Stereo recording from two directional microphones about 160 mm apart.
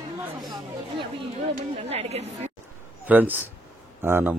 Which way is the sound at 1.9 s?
40° right (ahead or behind).